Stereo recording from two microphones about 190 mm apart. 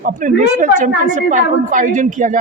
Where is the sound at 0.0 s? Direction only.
45° right (ahead or behind).